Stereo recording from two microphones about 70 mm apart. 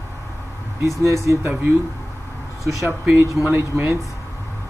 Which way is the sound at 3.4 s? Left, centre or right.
Right.